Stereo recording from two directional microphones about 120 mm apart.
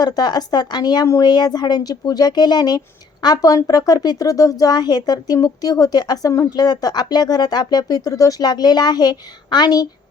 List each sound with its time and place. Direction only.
0.0 s speech: 35° left (ahead or behind)